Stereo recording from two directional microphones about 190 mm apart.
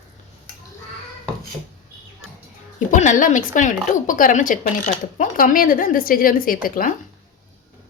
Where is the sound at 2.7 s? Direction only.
40° left (ahead or behind).